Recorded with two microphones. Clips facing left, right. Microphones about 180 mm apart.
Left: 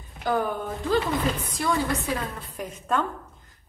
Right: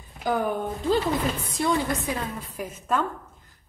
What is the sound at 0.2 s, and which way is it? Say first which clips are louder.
Speech: right 1 dB; 15° right (ahead or behind).